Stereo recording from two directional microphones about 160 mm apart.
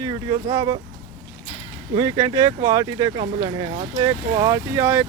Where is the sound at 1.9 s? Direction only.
25° right (ahead or behind).